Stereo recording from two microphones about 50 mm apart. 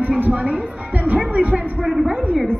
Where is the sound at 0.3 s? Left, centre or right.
Right.